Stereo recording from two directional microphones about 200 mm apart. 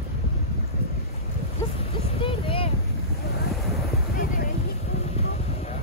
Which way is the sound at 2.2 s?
25° left (ahead or behind).